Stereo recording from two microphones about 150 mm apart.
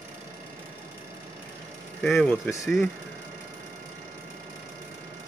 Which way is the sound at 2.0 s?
5° left (ahead or behind).